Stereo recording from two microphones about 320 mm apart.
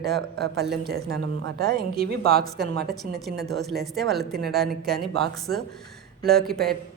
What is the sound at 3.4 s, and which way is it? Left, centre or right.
A woman's voice, centre.